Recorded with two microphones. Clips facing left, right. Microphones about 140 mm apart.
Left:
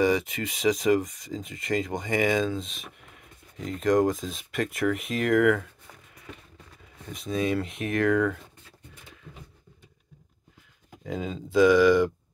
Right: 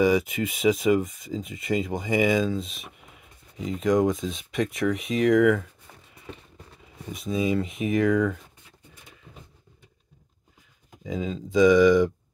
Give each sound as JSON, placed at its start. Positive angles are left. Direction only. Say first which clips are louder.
{"t": 0.0, "sound": "speech", "louder": "right 2 dB", "side_deg": -5}
{"t": 7.1, "sound": "speech", "louder": "right 2 dB", "side_deg": 0}
{"t": 11.1, "sound": "speech", "louder": "right 2 dB", "side_deg": 0}